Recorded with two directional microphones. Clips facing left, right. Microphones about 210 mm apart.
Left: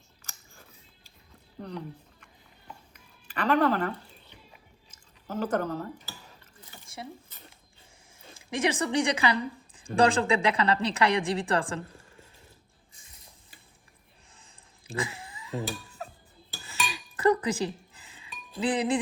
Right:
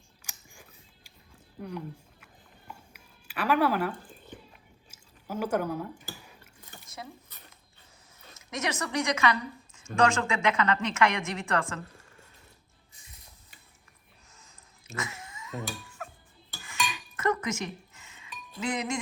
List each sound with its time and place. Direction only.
0.2 s biting: 15° right (ahead or behind)
1.6 s speech: 10° right (ahead or behind)
2.9 s a sound: 10° right (ahead or behind)
3.9 s a sound: 50° right (ahead or behind)
4.9 s chewing: 10° right (ahead or behind)
6.8 s a sound: 30° left (ahead or behind)
8.2 s a woman's voice: 30° left (ahead or behind)
14.3 s cat: 30° left (ahead or behind)
16.6 s chink: 30° left (ahead or behind)